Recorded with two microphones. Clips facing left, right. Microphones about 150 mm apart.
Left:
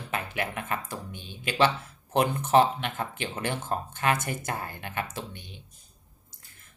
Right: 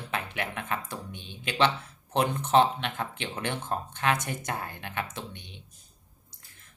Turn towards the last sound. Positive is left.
turn(degrees=5)  # may be behind; listen again after turning